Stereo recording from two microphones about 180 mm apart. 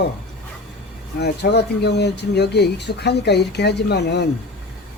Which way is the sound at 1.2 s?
65° left (ahead or behind).